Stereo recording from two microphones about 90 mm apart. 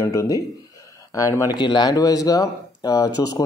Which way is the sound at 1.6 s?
55° left (ahead or behind).